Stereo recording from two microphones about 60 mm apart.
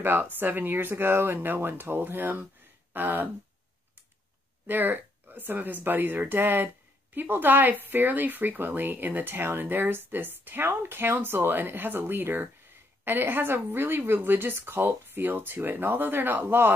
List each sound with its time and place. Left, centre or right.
0.0 s speech: right
2.9 s a sound: right
4.6 s speech: right